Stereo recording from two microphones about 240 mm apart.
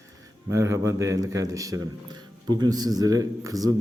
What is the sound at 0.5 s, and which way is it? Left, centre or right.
Speech, centre.